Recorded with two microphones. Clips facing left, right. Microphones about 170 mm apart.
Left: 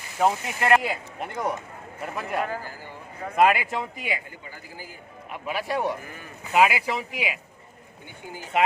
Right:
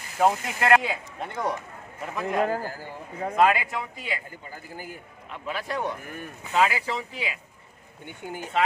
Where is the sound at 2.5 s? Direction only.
45° right (ahead or behind).